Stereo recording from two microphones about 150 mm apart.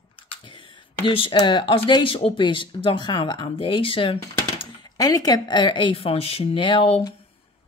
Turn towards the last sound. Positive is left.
turn(degrees=35)  # may be behind; listen again after turning